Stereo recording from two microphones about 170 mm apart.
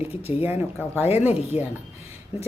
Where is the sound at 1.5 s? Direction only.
35° left (ahead or behind).